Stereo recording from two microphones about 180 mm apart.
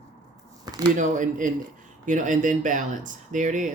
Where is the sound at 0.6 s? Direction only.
25° right (ahead or behind).